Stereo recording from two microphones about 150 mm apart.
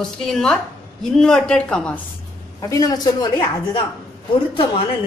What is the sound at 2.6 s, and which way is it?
Speech, 20° left (ahead or behind).